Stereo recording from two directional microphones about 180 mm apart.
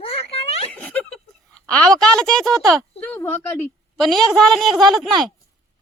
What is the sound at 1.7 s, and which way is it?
Speech, 5° left (ahead or behind).